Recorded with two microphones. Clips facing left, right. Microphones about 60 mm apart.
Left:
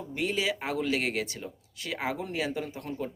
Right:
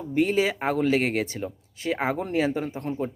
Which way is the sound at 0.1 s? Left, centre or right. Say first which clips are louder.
Right 7 dB; right.